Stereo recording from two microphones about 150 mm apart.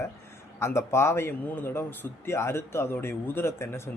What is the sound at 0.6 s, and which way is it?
A man's voice, 20° left (ahead or behind).